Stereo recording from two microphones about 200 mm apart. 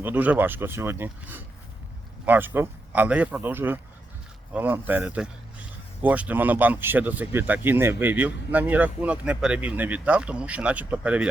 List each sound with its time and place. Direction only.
0.0 s speech: 10° right (ahead or behind)